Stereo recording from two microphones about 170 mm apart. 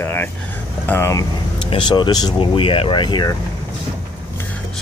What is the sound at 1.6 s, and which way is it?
Speech, 30° left (ahead or behind).